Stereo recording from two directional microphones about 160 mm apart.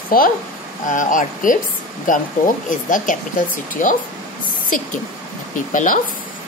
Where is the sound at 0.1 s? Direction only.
65° left (ahead or behind).